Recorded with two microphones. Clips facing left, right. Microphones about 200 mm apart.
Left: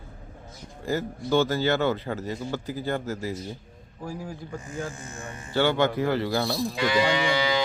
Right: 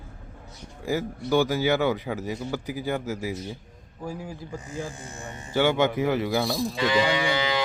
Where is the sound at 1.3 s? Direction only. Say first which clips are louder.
Right 1 dB; 15° right (ahead or behind).